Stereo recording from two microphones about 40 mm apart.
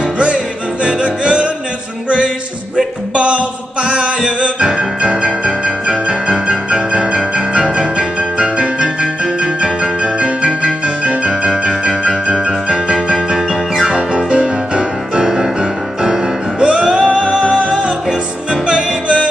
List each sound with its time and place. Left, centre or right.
0.8 s music: right
7.2 s piano: right
9.0 s music: right
12.9 s music: centre